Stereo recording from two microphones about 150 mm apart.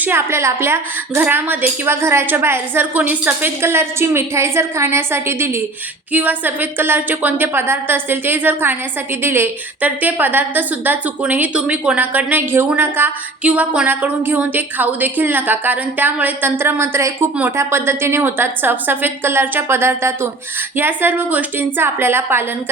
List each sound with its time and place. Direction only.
0.0 s a woman's voice: 15° right (ahead or behind)